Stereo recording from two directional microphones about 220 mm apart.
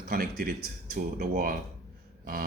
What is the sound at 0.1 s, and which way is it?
Speech, 45° right (ahead or behind).